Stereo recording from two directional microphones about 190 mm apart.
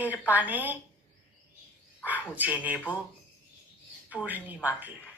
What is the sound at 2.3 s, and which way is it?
Speech, 10° right (ahead or behind).